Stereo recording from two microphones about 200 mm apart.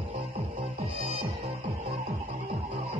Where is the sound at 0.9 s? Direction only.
30° right (ahead or behind).